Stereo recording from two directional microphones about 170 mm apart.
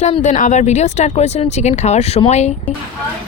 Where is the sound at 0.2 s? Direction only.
50° left (ahead or behind).